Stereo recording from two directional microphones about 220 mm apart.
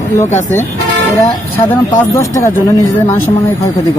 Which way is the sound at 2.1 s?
15° left (ahead or behind).